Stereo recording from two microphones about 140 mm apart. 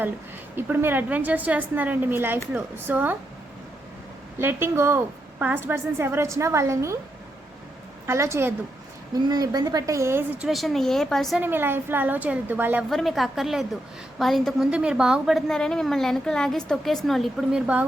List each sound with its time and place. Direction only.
0.5 s a woman's voice: 15° right (ahead or behind)
4.4 s a woman's voice: 15° right (ahead or behind)
8.0 s a woman's voice: 20° right (ahead or behind)
10.4 s a woman's voice: centre (ahead or behind)
11.3 s a woman's voice: 15° right (ahead or behind)
12.9 s a woman's voice: centre (ahead or behind)